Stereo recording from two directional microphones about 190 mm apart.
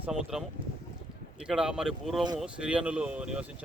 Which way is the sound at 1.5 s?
5° right (ahead or behind).